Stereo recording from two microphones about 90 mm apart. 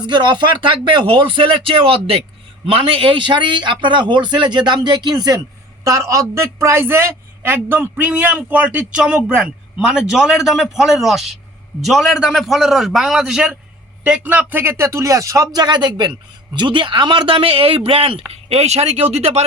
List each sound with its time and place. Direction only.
0.0 s a man's voice: 55° right (ahead or behind); by 13.6 s 5° right (ahead or behind)
14.3 s speech: 20° right (ahead or behind); by 15.6 s 35° right (ahead or behind)
15.6 s speech: 55° right (ahead or behind); by 18.2 s 90° right